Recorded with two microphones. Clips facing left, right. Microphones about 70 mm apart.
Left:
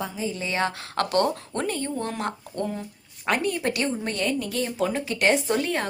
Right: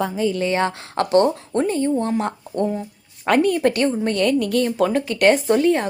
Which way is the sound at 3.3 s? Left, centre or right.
Right.